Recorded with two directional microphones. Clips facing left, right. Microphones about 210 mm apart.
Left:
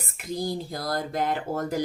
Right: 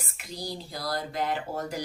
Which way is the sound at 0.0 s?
50° left (ahead or behind).